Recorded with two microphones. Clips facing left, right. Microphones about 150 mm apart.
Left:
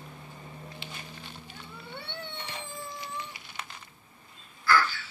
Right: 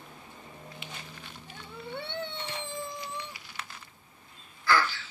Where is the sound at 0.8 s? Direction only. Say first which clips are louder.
Left 1 dB; 30° left (ahead or behind).